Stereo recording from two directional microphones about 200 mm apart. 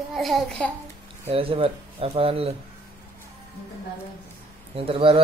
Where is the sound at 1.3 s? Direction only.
25° right (ahead or behind).